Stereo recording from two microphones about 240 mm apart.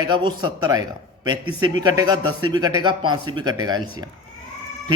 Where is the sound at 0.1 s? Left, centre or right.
Centre.